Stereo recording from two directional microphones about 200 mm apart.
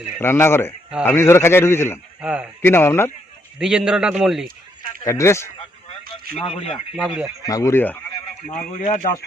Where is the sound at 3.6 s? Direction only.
5° right (ahead or behind).